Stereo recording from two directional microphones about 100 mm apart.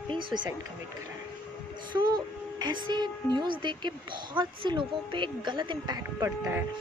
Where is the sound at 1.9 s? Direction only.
50° right (ahead or behind).